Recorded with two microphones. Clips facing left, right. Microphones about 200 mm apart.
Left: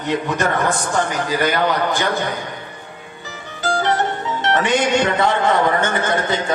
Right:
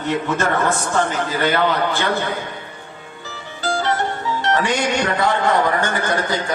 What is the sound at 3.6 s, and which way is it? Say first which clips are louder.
Music: left 2 dB; 20° left (ahead or behind).